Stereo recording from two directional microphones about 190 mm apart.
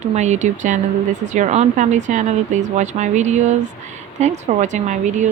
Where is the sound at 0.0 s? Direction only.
35° right (ahead or behind).